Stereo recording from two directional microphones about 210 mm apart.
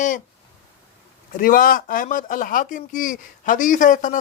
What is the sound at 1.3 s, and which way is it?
Speech, 40° left (ahead or behind).